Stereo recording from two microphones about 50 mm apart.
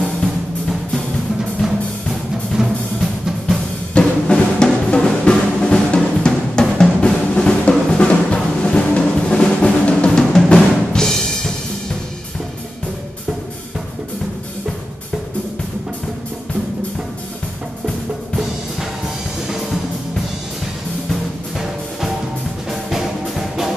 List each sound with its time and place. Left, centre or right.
2.5 s drum: centre
4.0 s drum: centre
7.9 s music: left
18.4 s music: centre
21.1 s music: centre